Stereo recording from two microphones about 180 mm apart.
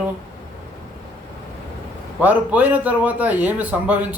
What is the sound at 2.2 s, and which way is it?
Speech, 10° right (ahead or behind).